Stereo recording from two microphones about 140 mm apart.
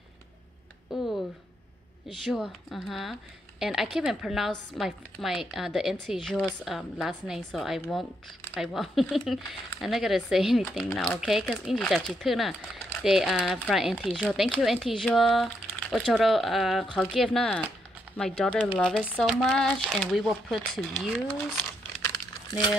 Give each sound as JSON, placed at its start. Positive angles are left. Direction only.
{"t": 0.9, "sound": "a sound", "side_deg": -5}
{"t": 2.0, "sound": "speech", "side_deg": 0}
{"t": 22.0, "sound": "crumpling", "side_deg": 25}